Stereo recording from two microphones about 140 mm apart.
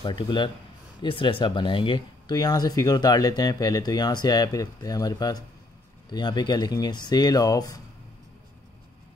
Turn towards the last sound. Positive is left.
turn(degrees=25)  # may be behind; listen again after turning